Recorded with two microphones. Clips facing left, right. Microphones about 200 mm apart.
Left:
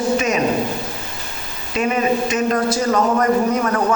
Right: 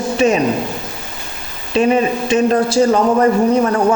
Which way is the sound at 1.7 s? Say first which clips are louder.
Right 4 dB; 30° right (ahead or behind).